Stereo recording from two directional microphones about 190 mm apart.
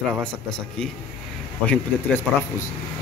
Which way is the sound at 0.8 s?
5° left (ahead or behind).